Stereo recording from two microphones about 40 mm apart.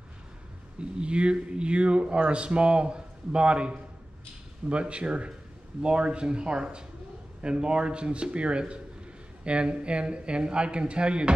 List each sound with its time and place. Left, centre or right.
0.7 s speech: right